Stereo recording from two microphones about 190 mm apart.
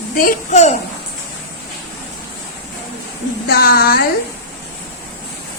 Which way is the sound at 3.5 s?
55° left (ahead or behind).